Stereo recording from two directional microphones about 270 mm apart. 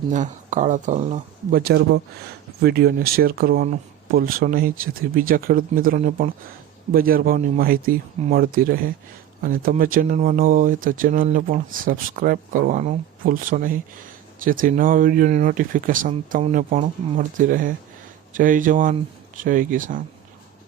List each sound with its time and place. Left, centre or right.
0.1 s speech: right